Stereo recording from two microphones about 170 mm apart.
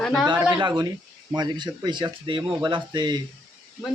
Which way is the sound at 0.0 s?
5° left (ahead or behind).